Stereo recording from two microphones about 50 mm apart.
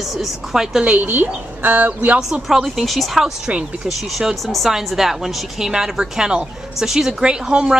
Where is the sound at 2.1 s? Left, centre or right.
Centre.